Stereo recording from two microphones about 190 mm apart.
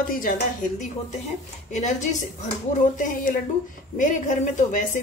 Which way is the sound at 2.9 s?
45° left (ahead or behind).